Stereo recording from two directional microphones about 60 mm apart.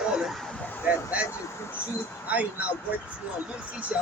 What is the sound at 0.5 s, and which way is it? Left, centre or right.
Vehicle, left.